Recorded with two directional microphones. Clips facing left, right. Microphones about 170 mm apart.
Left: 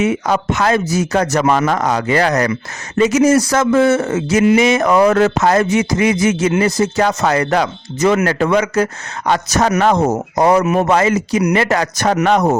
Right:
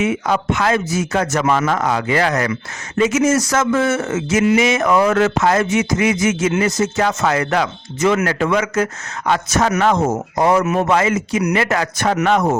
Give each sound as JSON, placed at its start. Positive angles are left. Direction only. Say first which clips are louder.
{"t": 0.0, "sound": "a man's voice", "louder": "left 2 dB", "side_deg": 40}